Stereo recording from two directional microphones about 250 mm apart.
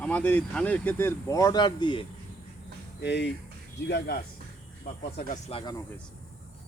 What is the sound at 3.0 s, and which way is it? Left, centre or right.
Speech, left.